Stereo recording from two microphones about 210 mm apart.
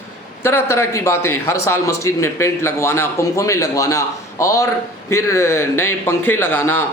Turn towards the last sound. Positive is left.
turn(degrees=10)  # may be behind; listen again after turning